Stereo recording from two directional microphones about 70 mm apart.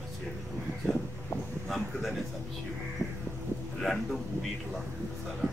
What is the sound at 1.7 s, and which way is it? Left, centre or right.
Speech, centre.